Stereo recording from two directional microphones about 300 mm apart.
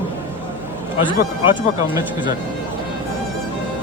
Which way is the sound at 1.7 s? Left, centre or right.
Centre.